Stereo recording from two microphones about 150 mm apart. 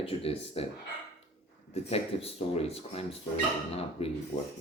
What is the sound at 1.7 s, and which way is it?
Speech, 40° left (ahead or behind).